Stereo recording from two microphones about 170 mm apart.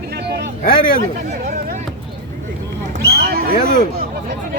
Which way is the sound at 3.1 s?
65° right (ahead or behind).